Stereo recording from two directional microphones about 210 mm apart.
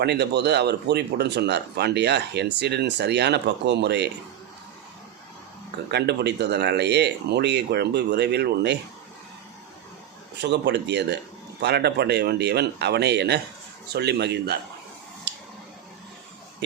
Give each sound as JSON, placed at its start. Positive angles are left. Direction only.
{"t": 0.0, "sound": "speech", "side_deg": -50}
{"t": 5.9, "sound": "speech", "side_deg": -50}
{"t": 10.4, "sound": "speech", "side_deg": -55}
{"t": 15.3, "sound": "tick-tock", "side_deg": -55}